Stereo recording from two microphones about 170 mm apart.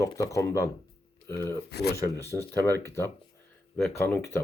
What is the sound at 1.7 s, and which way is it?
Speech, 70° left (ahead or behind).